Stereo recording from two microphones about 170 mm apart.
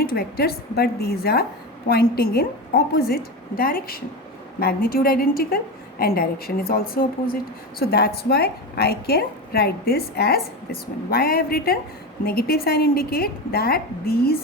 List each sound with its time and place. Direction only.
0.0 s a woman's voice: 65° left (ahead or behind)